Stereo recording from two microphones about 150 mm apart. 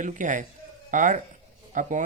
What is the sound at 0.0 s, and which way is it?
Speech, 60° right (ahead or behind).